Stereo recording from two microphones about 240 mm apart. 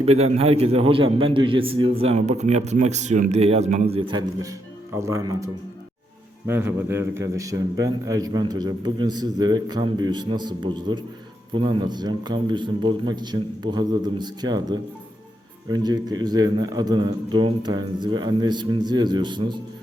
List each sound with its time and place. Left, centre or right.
0.0 s a man's voice: right
6.5 s a man's voice: centre